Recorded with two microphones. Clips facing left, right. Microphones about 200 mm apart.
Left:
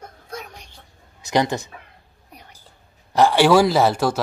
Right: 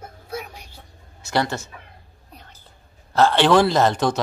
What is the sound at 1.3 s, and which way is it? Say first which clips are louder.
Speech: left 3 dB; 15° left (ahead or behind).